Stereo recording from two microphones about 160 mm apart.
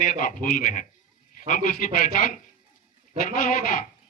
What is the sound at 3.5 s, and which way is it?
Speech, 60° left (ahead or behind).